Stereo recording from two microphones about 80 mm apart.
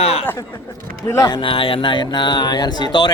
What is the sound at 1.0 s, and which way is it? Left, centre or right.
Speech, left.